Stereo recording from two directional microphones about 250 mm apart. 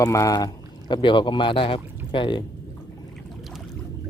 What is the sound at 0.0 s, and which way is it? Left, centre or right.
Speech, centre.